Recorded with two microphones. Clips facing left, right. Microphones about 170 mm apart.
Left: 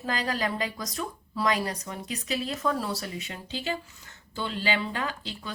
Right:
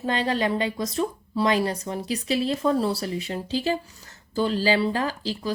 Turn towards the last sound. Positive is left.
turn(degrees=-35)  # may be behind; listen again after turning